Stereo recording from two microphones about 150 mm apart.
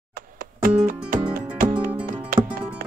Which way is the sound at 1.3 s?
70° right (ahead or behind).